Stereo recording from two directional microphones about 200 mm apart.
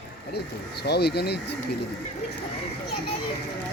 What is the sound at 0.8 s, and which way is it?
Speech, 55° left (ahead or behind).